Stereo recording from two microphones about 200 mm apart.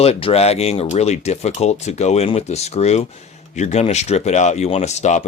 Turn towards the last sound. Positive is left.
turn(degrees=35)  # may be behind; listen again after turning